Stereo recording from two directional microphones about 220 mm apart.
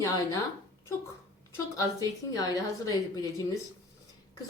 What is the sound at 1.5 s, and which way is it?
A woman's voice, 15° left (ahead or behind).